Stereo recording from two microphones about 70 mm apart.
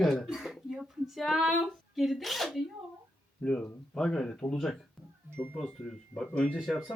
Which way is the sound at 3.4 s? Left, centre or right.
Centre.